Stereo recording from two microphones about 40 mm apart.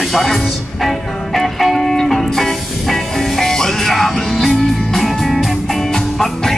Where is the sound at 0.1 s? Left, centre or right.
Centre.